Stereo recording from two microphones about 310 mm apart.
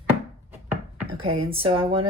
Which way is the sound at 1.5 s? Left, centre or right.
Centre.